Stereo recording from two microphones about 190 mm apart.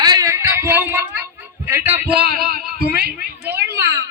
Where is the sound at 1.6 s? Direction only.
10° right (ahead or behind).